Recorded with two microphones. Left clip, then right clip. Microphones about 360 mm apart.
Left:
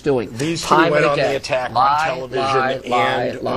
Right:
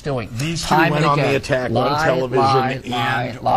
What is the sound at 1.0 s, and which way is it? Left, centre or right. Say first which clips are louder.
Speech: left 1 dB; right.